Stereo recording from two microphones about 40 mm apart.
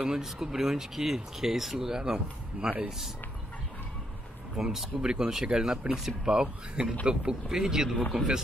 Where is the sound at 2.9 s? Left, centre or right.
Centre.